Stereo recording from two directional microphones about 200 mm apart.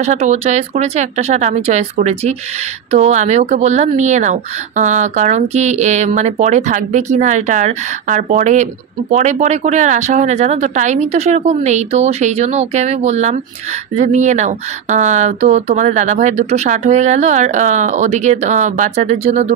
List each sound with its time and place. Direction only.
0.0 s speech: 35° right (ahead or behind)